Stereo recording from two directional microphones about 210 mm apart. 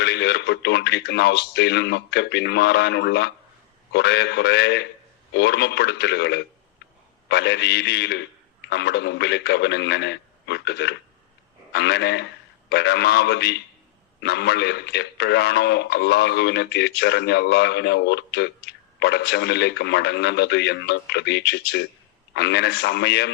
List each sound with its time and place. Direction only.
0.0 s a man's voice: 55° left (ahead or behind)